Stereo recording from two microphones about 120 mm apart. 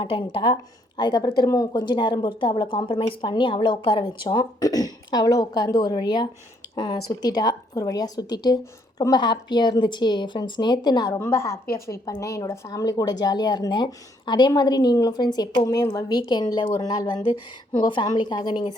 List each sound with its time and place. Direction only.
0.0 s a woman's voice: 45° left (ahead or behind)